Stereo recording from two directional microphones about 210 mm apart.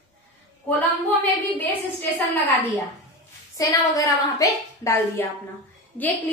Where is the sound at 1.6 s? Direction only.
10° left (ahead or behind).